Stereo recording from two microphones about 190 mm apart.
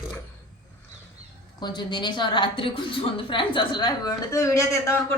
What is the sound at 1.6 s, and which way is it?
A woman's voice, 25° left (ahead or behind).